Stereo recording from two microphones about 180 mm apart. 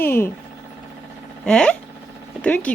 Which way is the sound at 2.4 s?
10° left (ahead or behind).